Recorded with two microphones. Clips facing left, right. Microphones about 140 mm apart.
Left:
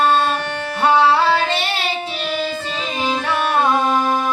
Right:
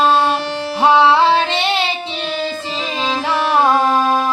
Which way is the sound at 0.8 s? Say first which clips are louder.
Right 3 dB; 25° right (ahead or behind).